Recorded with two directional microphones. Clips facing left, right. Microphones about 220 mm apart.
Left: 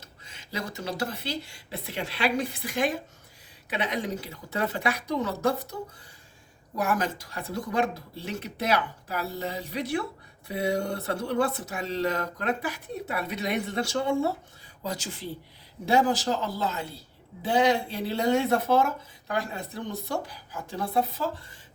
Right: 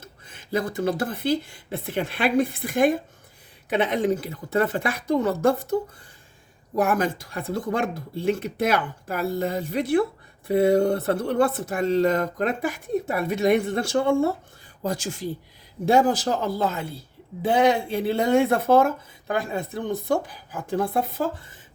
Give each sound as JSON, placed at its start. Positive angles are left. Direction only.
{"t": 0.0, "sound": "speech", "side_deg": -50}
{"t": 6.7, "sound": "speech", "side_deg": -50}